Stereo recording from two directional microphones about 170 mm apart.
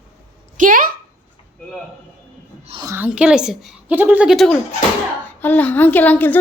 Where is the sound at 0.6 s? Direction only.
55° right (ahead or behind).